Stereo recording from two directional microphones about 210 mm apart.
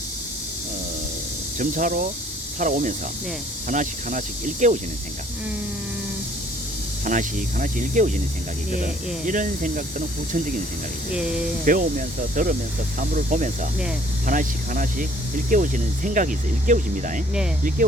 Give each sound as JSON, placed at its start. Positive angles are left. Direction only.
{"t": 1.5, "sound": "speech", "side_deg": -40}
{"t": 7.0, "sound": "speech", "side_deg": -40}
{"t": 11.1, "sound": "speech", "side_deg": -5}
{"t": 11.6, "sound": "speech", "side_deg": -40}